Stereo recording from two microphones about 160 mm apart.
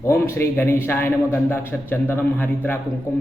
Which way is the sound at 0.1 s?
15° left (ahead or behind).